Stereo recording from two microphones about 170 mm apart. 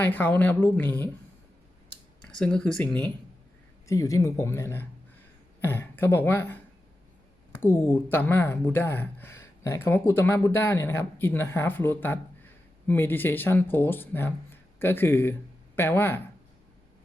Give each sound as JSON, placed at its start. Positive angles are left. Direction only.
{"t": 0.0, "sound": "a woman's voice", "side_deg": 10}
{"t": 2.4, "sound": "a woman's voice", "side_deg": 5}
{"t": 7.6, "sound": "a woman's voice", "side_deg": 15}